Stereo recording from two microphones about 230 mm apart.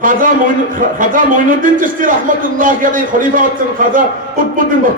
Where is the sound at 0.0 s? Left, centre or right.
Right.